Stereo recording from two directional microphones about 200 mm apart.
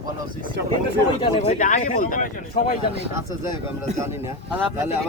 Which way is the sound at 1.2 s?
35° left (ahead or behind).